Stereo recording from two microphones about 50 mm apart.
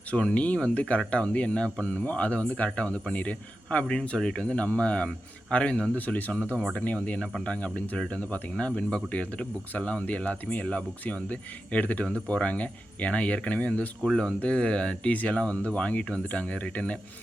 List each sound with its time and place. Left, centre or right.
0.1 s speech: left
14.0 s speech: centre